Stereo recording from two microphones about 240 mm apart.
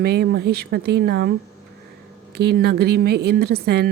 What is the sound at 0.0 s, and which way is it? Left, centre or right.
A woman's voice, right.